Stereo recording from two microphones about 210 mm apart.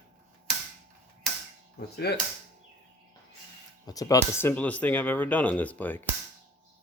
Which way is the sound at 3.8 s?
15° left (ahead or behind).